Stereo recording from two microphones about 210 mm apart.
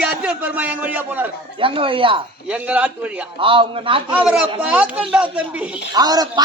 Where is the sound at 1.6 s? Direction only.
25° right (ahead or behind).